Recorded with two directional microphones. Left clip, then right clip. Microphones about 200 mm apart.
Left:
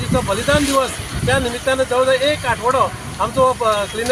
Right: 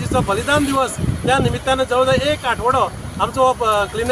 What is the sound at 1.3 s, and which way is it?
Speech, 25° right (ahead or behind).